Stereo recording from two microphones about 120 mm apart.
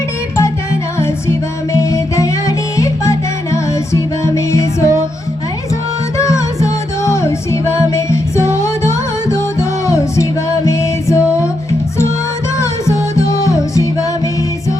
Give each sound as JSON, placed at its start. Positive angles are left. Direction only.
{"t": 0.9, "sound": "music", "side_deg": 20}
{"t": 6.1, "sound": "music", "side_deg": 25}
{"t": 12.5, "sound": "music", "side_deg": 25}